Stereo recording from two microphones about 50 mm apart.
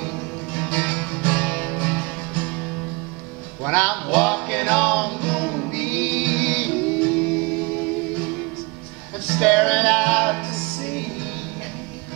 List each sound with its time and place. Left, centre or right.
0.6 s music: left
3.6 s music: centre
9.3 s music: centre